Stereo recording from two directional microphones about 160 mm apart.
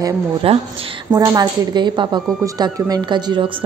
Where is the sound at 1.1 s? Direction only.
25° right (ahead or behind).